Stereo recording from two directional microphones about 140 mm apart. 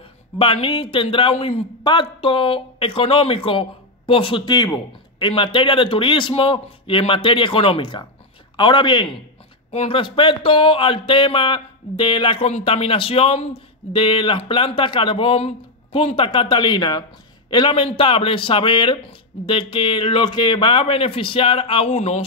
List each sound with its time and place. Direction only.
0.4 s speech: 40° left (ahead or behind)